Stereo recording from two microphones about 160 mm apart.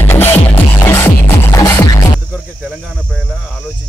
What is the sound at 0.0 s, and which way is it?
Music, 15° left (ahead or behind).